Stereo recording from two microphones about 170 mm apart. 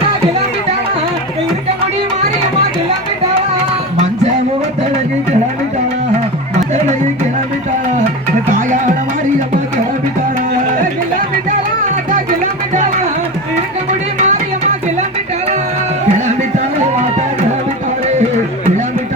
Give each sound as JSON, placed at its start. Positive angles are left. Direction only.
{"t": 8.5, "sound": "music", "side_deg": -50}
{"t": 12.1, "sound": "music", "side_deg": -50}
{"t": 14.2, "sound": "music", "side_deg": -45}
{"t": 16.1, "sound": "music", "side_deg": -45}